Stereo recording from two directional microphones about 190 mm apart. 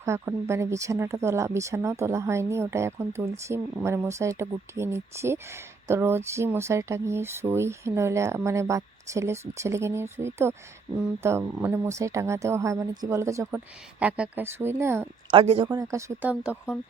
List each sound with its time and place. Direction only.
0.0 s speech: 15° right (ahead or behind)
15.3 s speech: 30° right (ahead or behind); by 16.7 s 5° right (ahead or behind)